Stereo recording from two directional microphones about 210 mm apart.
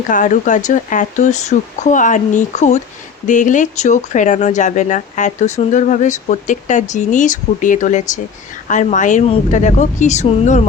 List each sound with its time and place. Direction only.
0.1 s speech: 35° left (ahead or behind)